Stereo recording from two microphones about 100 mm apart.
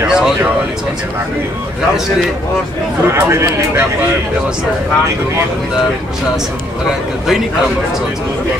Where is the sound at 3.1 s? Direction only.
25° right (ahead or behind).